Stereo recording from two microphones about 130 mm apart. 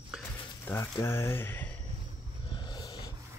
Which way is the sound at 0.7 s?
20° left (ahead or behind).